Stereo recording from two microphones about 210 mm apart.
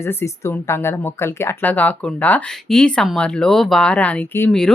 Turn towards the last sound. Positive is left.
turn(degrees=5)  # may be behind; listen again after turning